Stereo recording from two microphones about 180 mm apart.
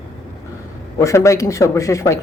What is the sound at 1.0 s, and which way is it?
A man's voice, 15° left (ahead or behind).